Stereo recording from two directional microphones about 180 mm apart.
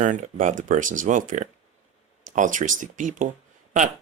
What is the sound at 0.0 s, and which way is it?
Speech, 45° right (ahead or behind).